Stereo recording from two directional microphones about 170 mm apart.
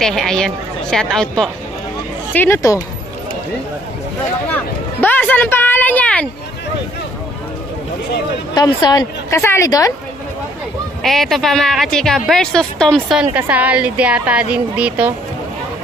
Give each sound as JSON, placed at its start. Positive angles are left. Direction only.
{"t": 0.0, "sound": "a woman's voice", "side_deg": 0}
{"t": 4.5, "sound": "a sound", "side_deg": 10}
{"t": 8.5, "sound": "a woman's voice", "side_deg": 25}
{"t": 11.0, "sound": "a woman's voice", "side_deg": 0}
{"t": 13.2, "sound": "a woman's voice", "side_deg": -10}